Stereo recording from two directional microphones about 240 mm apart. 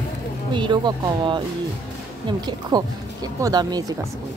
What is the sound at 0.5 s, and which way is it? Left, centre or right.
Speech, centre.